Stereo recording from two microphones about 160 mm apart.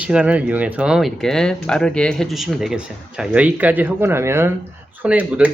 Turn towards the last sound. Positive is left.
turn(degrees=-10)  # may be behind; listen again after turning